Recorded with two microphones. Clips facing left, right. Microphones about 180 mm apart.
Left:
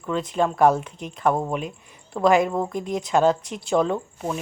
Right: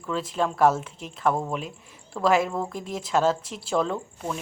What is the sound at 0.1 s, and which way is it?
A woman's voice, centre (ahead or behind).